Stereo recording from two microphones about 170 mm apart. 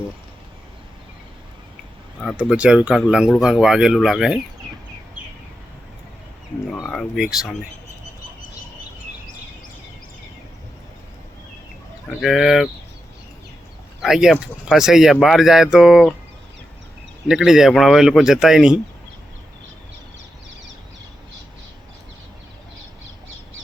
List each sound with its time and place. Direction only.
2.5 s speech: 5° right (ahead or behind)
6.8 s speech: 5° left (ahead or behind)
12.2 s speech: centre (ahead or behind)
14.0 s speech: 5° right (ahead or behind)
17.2 s speech: 5° right (ahead or behind)